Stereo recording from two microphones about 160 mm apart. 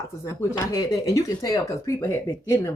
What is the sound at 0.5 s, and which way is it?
Speech, 20° left (ahead or behind).